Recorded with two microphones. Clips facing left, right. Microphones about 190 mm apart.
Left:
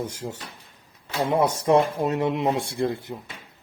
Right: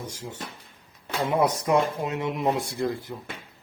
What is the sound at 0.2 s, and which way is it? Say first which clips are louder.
Speech: left 5 dB; 50° left (ahead or behind).